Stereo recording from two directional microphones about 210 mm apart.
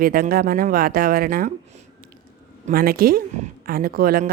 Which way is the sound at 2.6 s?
45° right (ahead or behind).